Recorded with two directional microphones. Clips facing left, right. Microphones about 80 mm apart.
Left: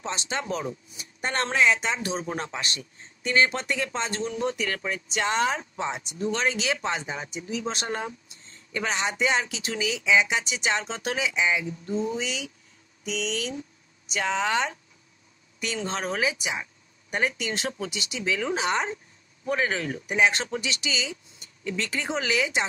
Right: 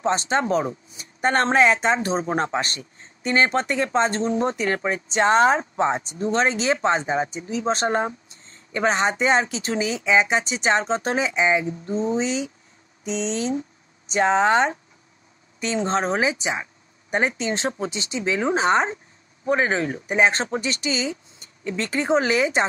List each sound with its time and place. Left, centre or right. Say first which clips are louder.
0.0 s speech: right 10 dB; right